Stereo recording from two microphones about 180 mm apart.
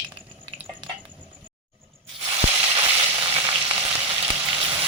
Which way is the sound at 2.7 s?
30° right (ahead or behind).